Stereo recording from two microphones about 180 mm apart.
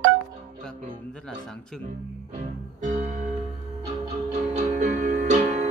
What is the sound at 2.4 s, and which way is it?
Music, 40° right (ahead or behind).